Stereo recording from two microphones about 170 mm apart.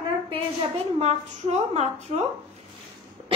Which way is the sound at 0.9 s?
40° right (ahead or behind).